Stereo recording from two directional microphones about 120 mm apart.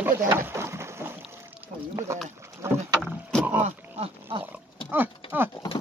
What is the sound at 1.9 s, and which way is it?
Speech, 25° right (ahead or behind).